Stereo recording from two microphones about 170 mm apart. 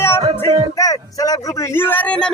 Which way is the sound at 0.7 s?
20° left (ahead or behind).